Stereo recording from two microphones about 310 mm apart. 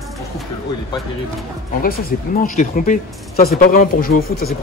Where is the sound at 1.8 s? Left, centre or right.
Left.